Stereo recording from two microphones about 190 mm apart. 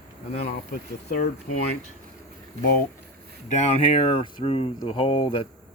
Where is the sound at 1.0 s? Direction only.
55° left (ahead or behind).